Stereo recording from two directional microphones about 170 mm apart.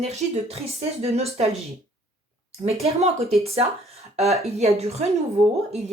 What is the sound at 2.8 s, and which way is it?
Speech, 40° right (ahead or behind).